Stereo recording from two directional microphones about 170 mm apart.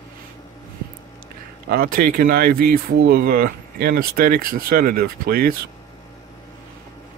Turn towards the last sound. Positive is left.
turn(degrees=-60)  # may be behind; listen again after turning